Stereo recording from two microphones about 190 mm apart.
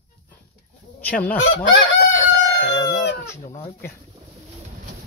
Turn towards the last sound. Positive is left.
turn(degrees=15)  # may be behind; listen again after turning